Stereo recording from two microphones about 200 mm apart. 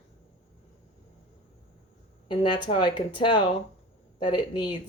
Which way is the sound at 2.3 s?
25° left (ahead or behind).